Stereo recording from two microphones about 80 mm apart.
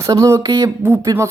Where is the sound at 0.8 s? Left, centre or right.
Right.